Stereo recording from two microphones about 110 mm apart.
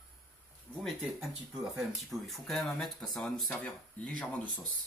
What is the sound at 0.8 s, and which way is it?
Speech, 5° right (ahead or behind).